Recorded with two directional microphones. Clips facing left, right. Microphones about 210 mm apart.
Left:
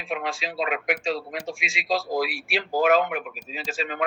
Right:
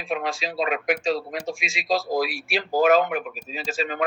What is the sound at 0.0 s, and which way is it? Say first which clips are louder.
Speech: right 2 dB; 40° right (ahead or behind).